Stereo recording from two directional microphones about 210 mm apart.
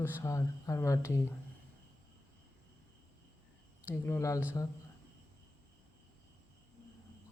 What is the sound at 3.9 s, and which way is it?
Speech, 15° left (ahead or behind).